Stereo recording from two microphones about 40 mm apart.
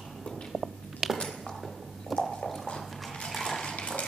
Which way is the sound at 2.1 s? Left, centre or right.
Centre.